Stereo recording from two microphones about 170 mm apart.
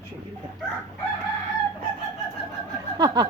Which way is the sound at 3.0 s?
25° right (ahead or behind).